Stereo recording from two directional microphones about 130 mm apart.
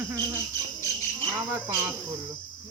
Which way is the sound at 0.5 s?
20° left (ahead or behind).